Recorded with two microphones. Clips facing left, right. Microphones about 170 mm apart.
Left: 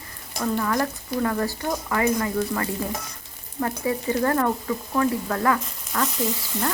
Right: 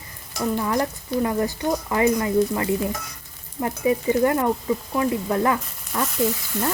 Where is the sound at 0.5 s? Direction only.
20° right (ahead or behind).